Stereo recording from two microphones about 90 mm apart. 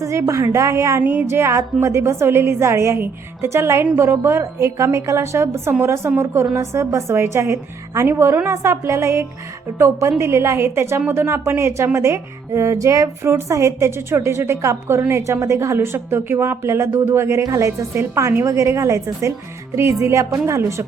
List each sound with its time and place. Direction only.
0.0 s a woman's voice: 35° right (ahead or behind)